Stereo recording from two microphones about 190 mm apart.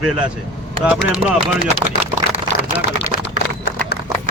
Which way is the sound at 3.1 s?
45° left (ahead or behind).